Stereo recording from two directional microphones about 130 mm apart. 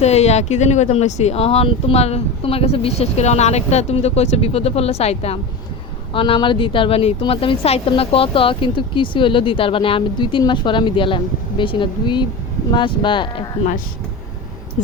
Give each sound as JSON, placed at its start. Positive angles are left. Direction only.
{"t": 0.0, "sound": "speech", "side_deg": 55}
{"t": 6.1, "sound": "speech", "side_deg": 40}